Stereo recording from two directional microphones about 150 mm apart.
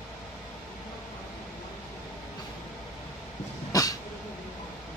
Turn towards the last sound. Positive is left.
turn(degrees=25)  # may be behind; listen again after turning